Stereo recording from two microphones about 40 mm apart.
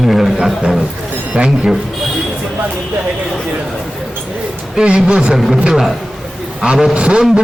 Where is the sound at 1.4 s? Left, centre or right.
Right.